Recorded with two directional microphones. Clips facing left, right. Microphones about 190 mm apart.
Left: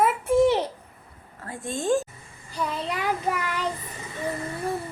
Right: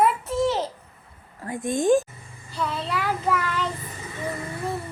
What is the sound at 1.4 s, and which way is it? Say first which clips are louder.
Speech: right 6 dB; 15° right (ahead or behind).